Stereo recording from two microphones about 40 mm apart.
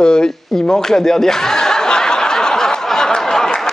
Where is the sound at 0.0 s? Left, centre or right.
Centre.